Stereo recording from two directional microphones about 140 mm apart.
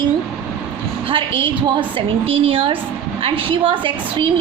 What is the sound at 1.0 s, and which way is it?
A woman's voice, 40° right (ahead or behind).